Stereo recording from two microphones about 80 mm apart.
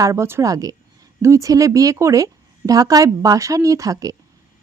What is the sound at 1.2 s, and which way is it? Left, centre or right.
A woman's voice, right.